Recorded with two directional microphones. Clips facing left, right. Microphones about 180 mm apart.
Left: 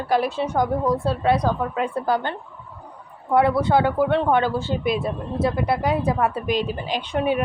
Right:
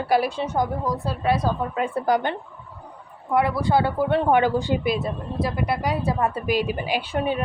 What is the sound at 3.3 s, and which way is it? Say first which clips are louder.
Speech: left 3 dB; 25° left (ahead or behind).